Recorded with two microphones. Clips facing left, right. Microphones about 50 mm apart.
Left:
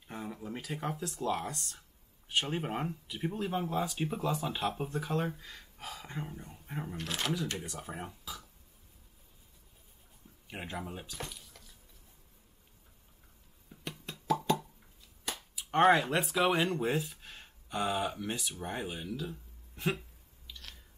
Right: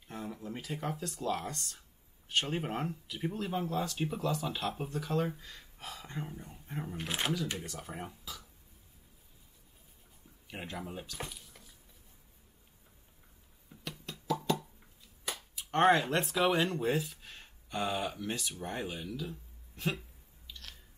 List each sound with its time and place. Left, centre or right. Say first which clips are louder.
0.1 s speech: left 1 dB; centre
7.0 s speech: right 1 dB; right
7.5 s speech: left 1 dB; centre
10.5 s speech: left 1 dB; centre
11.1 s a sound: even; centre
13.7 s music: left 1 dB; centre
14.4 s plop: left 2 dB; centre
15.5 s speech: left 1 dB; centre